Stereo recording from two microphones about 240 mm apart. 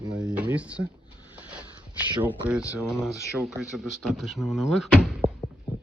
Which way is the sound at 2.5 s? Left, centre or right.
Centre.